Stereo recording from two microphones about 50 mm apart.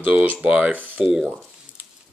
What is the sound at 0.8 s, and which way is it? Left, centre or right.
Speech, right.